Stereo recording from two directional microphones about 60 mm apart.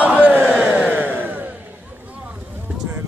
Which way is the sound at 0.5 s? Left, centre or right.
Right.